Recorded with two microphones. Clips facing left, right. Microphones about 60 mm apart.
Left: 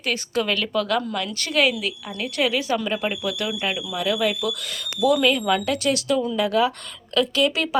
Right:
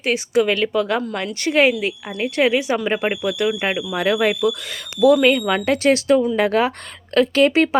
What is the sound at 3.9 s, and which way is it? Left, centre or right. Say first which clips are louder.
Speech: right 5 dB; right.